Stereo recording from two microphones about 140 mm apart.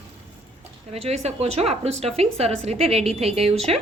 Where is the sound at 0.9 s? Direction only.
50° right (ahead or behind).